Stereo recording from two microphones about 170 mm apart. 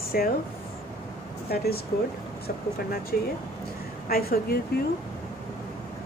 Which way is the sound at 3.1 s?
60° left (ahead or behind).